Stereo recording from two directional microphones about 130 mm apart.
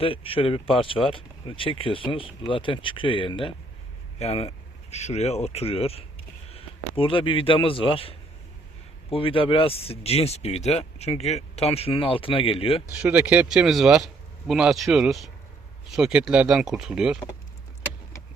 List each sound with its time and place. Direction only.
0.0 s speech: 45° left (ahead or behind)
12.9 s speech: 10° right (ahead or behind)